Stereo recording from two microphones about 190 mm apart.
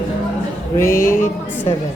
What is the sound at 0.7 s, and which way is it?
Speech, 15° left (ahead or behind).